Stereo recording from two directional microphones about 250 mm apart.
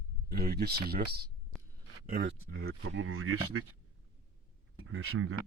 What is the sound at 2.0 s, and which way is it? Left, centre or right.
Speech, right.